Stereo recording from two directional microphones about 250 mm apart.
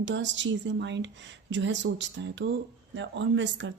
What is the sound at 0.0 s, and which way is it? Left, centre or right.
A woman's voice, right.